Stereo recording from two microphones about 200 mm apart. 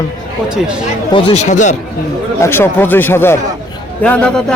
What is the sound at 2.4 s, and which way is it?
A man's voice, 10° left (ahead or behind).